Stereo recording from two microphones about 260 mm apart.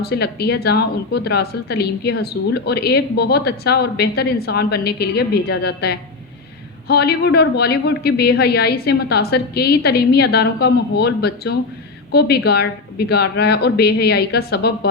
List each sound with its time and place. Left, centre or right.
0.0 s a woman's voice: left